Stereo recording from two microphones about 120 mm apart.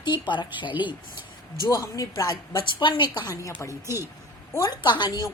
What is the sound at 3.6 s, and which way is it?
A woman's voice, 25° left (ahead or behind).